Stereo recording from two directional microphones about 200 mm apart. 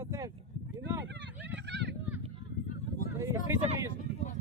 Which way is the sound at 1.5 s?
60° right (ahead or behind).